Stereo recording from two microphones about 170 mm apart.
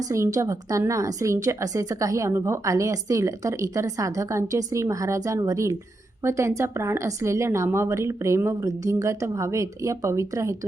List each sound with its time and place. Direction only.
0.0 s a woman's voice: 20° right (ahead or behind)